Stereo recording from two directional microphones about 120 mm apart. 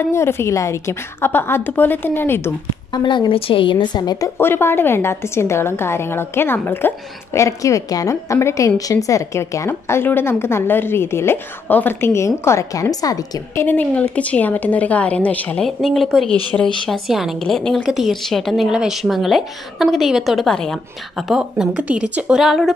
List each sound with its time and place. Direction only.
0.1 s a woman's voice: 20° left (ahead or behind)
2.9 s speech: 40° left (ahead or behind)
4.4 s a woman's voice: 20° left (ahead or behind)
13.7 s a woman's voice: 15° left (ahead or behind)
15.6 s a woman's voice: centre (ahead or behind)